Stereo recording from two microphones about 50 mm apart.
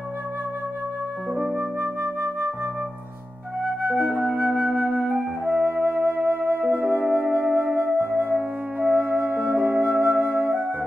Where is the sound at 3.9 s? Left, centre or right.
Right.